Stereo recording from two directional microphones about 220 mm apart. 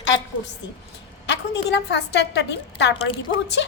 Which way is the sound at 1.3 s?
50° left (ahead or behind).